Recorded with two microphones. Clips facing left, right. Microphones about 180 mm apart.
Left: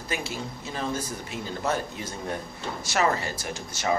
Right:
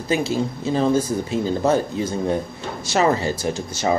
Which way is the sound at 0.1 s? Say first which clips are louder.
Right 12 dB; 30° right (ahead or behind).